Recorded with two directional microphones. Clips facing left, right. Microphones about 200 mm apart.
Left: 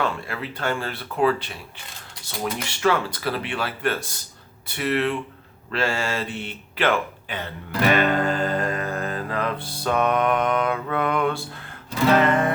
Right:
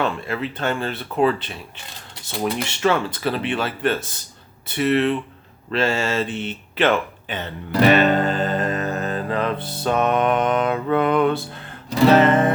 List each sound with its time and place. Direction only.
0.0 s speech: 25° right (ahead or behind)
7.7 s music: 30° right (ahead or behind)
11.9 s speech: 30° right (ahead or behind)